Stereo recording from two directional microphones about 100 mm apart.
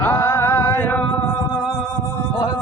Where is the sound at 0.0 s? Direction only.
20° left (ahead or behind).